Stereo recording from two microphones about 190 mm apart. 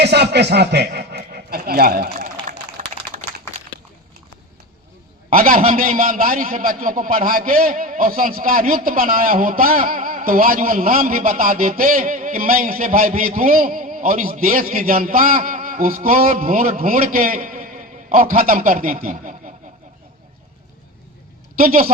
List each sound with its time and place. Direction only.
0.0 s a sound: 60° right (ahead or behind); by 2.6 s 45° right (ahead or behind)
5.3 s a man's voice: 45° right (ahead or behind)
21.6 s a man's voice: 45° right (ahead or behind)